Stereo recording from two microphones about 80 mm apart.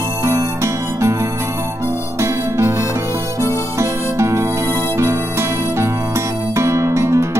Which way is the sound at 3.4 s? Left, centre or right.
Right.